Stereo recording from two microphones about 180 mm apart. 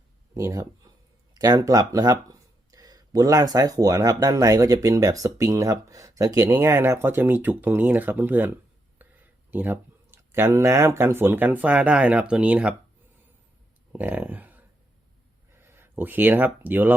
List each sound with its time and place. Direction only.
0.3 s speech: 15° right (ahead or behind)
13.9 s speech: 10° right (ahead or behind)